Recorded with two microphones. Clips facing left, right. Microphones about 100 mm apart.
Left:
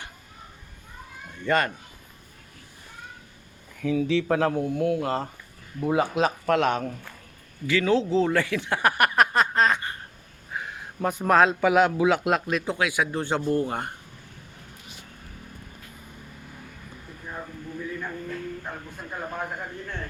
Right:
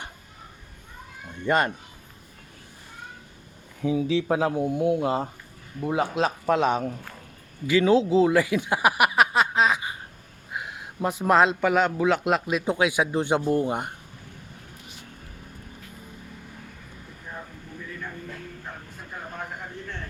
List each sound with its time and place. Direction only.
1.4 s speech: 20° right (ahead or behind)
3.8 s speech: 20° right (ahead or behind)
4.0 s speech: 5° right (ahead or behind)
7.7 s a man's voice: 15° right (ahead or behind); by 12.4 s 5° left (ahead or behind)
12.5 s speech: 15° right (ahead or behind)